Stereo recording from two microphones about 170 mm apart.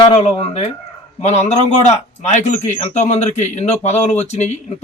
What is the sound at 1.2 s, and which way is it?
Speech, 40° left (ahead or behind).